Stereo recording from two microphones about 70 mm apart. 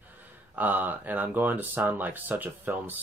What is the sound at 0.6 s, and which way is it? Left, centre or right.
Speech, right.